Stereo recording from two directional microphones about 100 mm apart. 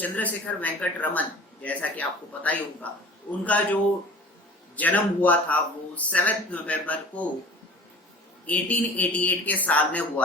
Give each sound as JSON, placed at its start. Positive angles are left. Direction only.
{"t": 0.0, "sound": "speech", "side_deg": 15}
{"t": 4.8, "sound": "speech", "side_deg": 15}
{"t": 8.4, "sound": "speech", "side_deg": 15}